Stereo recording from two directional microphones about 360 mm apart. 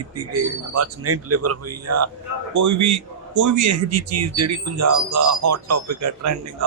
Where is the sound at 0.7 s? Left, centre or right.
Right.